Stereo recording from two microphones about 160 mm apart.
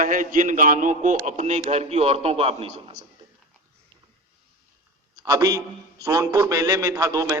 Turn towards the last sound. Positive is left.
turn(degrees=-20)  # may be behind; listen again after turning